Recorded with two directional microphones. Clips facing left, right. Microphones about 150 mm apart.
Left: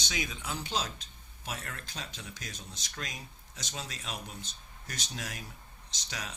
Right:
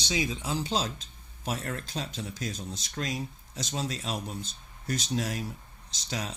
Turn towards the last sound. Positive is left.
turn(degrees=-30)  # may be behind; listen again after turning